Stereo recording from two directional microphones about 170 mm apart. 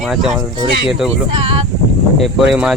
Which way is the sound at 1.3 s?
30° right (ahead or behind).